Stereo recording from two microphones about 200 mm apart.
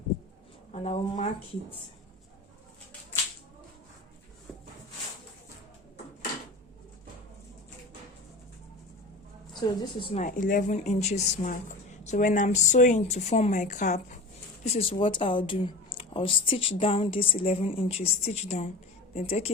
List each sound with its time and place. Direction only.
0.7 s a woman's voice: 30° left (ahead or behind)
9.6 s speech: 25° left (ahead or behind)
10.2 s a woman's voice: 40° left (ahead or behind)